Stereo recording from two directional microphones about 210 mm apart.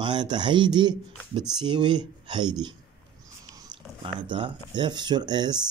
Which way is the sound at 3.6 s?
25° right (ahead or behind).